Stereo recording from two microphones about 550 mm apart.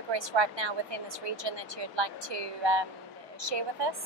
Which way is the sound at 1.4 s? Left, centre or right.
Right.